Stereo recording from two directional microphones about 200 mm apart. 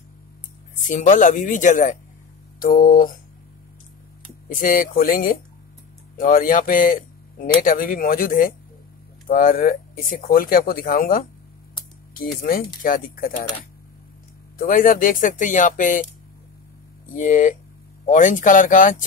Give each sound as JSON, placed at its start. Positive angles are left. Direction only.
{"t": 0.8, "sound": "speech", "side_deg": 40}
{"t": 4.5, "sound": "speech", "side_deg": 45}
{"t": 14.6, "sound": "speech", "side_deg": 45}
{"t": 17.1, "sound": "speech", "side_deg": 40}